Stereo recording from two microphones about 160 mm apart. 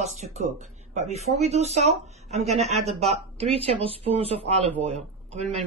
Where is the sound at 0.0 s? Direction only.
45° right (ahead or behind).